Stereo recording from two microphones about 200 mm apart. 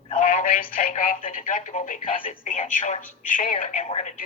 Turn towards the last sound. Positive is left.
turn(degrees=35)  # may be behind; listen again after turning